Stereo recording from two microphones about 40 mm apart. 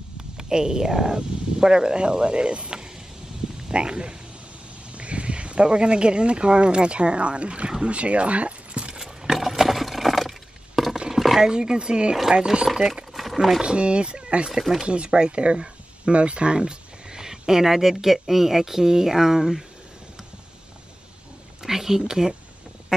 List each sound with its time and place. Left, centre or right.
0.4 s speech: centre
8.9 s a sound: centre
11.5 s speech: centre
12.6 s speech: centre
13.1 s a sound: centre
13.6 s speech: right
14.6 s speech: centre
14.9 s speech: right; by 19.6 s centre
21.6 s speech: centre